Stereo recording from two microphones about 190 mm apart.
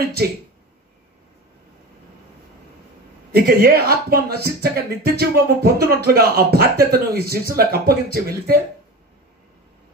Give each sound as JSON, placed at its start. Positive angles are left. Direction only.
{"t": 0.0, "sound": "speech", "side_deg": -55}
{"t": 3.3, "sound": "speech", "side_deg": -55}